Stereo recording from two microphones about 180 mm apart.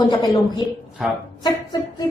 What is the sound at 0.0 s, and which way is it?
A woman's voice, 25° left (ahead or behind).